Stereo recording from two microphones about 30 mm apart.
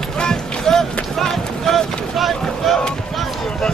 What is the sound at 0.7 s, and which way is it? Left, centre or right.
Run, centre.